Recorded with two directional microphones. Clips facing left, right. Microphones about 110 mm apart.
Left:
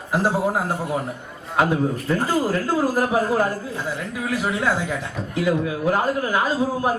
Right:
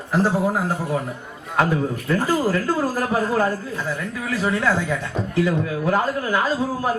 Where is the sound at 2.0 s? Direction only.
20° left (ahead or behind).